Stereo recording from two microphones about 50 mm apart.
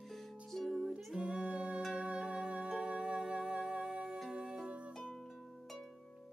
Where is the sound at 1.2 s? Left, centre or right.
Centre.